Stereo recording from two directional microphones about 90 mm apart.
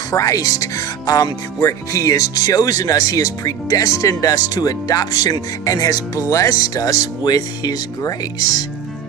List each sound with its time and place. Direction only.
0.1 s speech: 40° left (ahead or behind)